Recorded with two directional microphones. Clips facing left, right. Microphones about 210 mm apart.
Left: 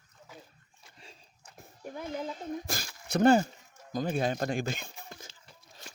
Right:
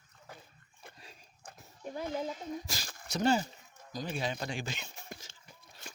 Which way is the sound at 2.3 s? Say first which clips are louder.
Left 4 dB; 55° left (ahead or behind).